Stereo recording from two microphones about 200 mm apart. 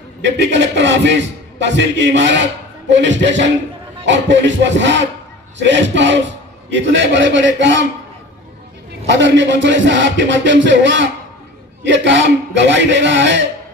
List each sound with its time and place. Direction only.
0.4 s music: 65° right (ahead or behind)
9.1 s music: 65° right (ahead or behind)